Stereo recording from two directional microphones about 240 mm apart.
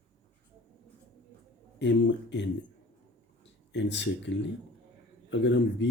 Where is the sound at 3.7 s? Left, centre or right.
Left.